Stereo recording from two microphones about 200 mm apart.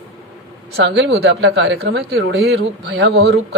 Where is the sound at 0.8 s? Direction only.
55° right (ahead or behind).